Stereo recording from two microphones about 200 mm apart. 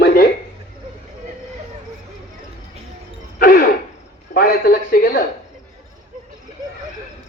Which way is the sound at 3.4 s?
45° left (ahead or behind).